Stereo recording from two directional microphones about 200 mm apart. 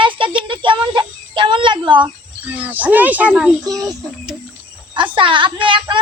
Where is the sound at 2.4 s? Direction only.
10° right (ahead or behind).